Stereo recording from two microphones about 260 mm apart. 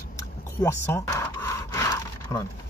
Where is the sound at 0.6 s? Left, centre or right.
Centre.